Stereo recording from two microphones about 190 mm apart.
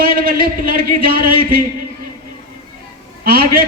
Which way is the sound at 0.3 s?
50° right (ahead or behind).